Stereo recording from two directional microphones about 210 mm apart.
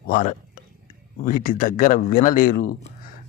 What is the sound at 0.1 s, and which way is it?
Speech, 40° left (ahead or behind).